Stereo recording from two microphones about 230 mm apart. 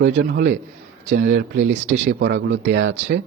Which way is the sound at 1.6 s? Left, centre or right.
Right.